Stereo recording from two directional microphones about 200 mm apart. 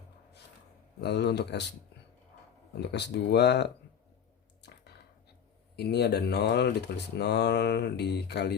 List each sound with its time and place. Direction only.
1.0 s speech: 55° left (ahead or behind)
2.8 s speech: 60° left (ahead or behind)
5.7 s speech: 55° left (ahead or behind)